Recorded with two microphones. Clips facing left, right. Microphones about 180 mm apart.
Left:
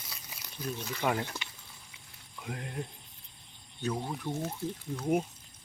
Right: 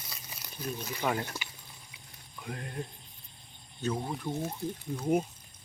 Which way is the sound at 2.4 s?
15° left (ahead or behind).